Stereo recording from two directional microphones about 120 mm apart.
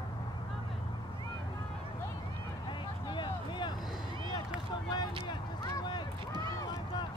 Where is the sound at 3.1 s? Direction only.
40° left (ahead or behind).